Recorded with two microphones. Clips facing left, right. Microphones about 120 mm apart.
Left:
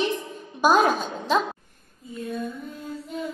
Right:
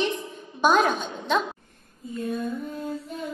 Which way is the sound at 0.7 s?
35° left (ahead or behind).